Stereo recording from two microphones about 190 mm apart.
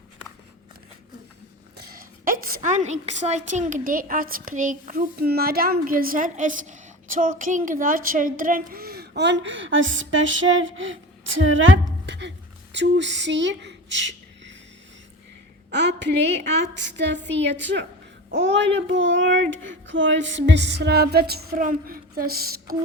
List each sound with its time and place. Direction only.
1.8 s a woman's voice: 50° right (ahead or behind); by 14.5 s 70° right (ahead or behind)
15.7 s a child's voice: 65° right (ahead or behind)